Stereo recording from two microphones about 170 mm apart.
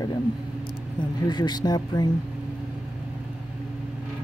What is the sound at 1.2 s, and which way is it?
Speech, 25° left (ahead or behind).